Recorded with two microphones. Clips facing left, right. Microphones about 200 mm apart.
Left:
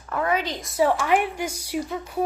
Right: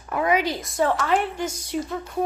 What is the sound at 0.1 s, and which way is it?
Speech, 15° right (ahead or behind).